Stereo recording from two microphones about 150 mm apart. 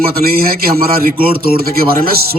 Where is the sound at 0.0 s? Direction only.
85° right.